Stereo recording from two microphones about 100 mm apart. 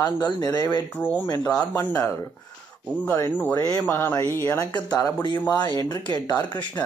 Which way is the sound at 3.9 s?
20° left (ahead or behind).